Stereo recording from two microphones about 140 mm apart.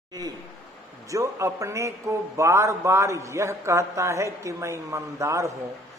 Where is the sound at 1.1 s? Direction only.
20° right (ahead or behind).